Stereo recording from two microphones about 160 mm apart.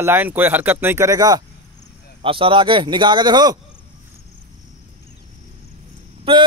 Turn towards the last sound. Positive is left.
turn(degrees=-35)  # may be behind; listen again after turning